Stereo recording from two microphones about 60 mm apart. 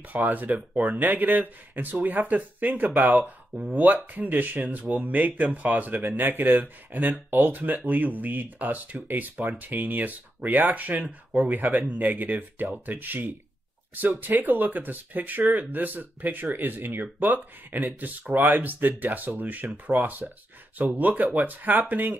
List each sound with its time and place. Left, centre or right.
0.1 s speech: right
3.1 s speech: centre
14.4 s speech: right